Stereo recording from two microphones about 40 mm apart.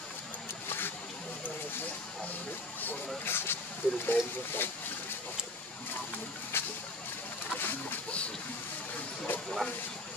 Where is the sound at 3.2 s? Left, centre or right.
Left.